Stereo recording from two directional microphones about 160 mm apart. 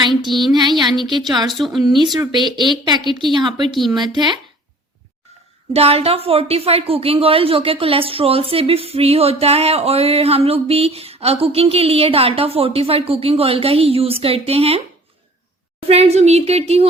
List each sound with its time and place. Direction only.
0.1 s a sound: centre (ahead or behind)
0.5 s a woman's voice: 30° right (ahead or behind)
1.5 s a woman's voice: centre (ahead or behind)
1.8 s a woman's voice: 30° right (ahead or behind)
3.8 s a woman's voice: centre (ahead or behind)
4.0 s a woman's voice: 30° right (ahead or behind)
5.7 s a woman's voice: 40° right (ahead or behind)
15.9 s a woman's voice: 40° right (ahead or behind)